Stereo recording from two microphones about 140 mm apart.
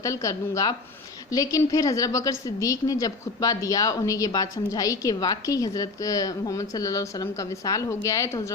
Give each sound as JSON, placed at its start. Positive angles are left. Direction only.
{"t": 0.0, "sound": "a woman's voice", "side_deg": 25}